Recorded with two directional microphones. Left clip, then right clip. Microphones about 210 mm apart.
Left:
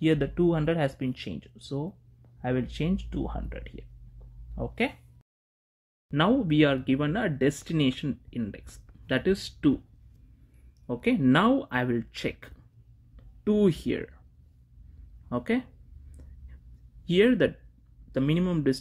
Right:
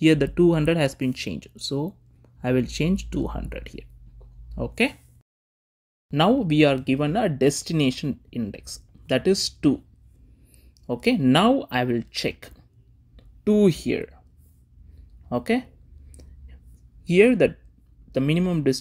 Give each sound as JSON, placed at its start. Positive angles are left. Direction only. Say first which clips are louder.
{"t": 0.0, "sound": "speech", "louder": "right 6 dB", "side_deg": -25}
{"t": 6.0, "sound": "speech", "louder": "right 5 dB", "side_deg": -15}
{"t": 10.9, "sound": "speech", "louder": "right 4 dB", "side_deg": -20}
{"t": 15.2, "sound": "speech", "louder": "right 5 dB", "side_deg": -15}
{"t": 16.1, "sound": "a sound", "louder": "right 6 dB", "side_deg": -15}
{"t": 17.0, "sound": "speech", "louder": "right 5 dB", "side_deg": -15}